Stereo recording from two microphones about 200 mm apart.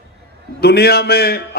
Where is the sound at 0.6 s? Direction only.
50° left (ahead or behind).